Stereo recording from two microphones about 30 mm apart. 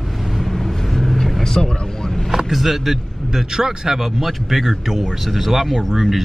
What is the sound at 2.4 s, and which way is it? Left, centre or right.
A man's voice, centre.